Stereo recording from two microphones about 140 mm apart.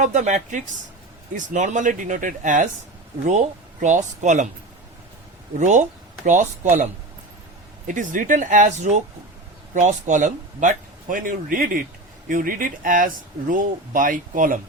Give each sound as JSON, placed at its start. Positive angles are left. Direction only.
{"t": 0.0, "sound": "speech", "side_deg": -60}
{"t": 5.5, "sound": "speech", "side_deg": -60}
{"t": 7.9, "sound": "speech", "side_deg": -70}
{"t": 12.3, "sound": "speech", "side_deg": -75}